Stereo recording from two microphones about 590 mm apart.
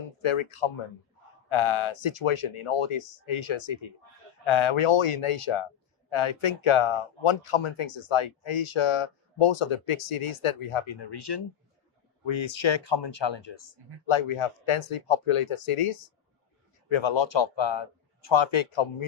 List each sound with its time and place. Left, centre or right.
0.2 s speech: left
16.9 s speech: left